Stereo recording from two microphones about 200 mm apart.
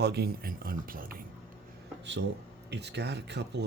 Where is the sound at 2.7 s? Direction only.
60° right (ahead or behind).